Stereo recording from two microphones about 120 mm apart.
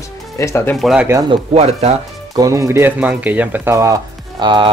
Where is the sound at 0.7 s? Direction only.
5° right (ahead or behind).